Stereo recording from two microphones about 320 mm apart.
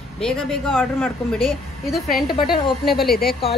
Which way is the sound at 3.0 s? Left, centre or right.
Left.